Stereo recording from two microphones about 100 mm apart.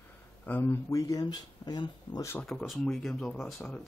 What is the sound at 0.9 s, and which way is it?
Speech, 35° left (ahead or behind).